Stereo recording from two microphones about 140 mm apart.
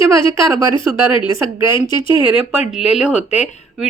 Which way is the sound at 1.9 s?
35° left (ahead or behind).